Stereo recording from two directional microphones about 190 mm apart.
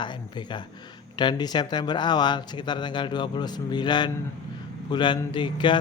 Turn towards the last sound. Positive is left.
turn(degrees=25)  # may be behind; listen again after turning